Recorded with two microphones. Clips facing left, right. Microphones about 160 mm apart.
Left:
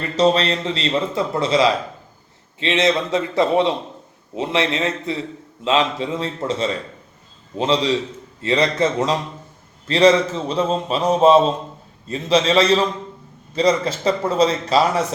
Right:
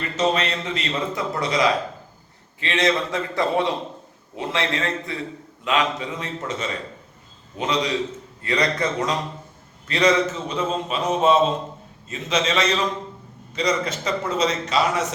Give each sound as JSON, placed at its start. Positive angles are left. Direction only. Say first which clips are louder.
{"t": 0.2, "sound": "a man's voice", "louder": "left 6 dB", "side_deg": 30}